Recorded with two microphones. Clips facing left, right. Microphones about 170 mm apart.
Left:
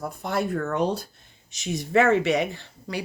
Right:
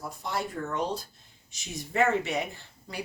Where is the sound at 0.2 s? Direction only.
60° left (ahead or behind).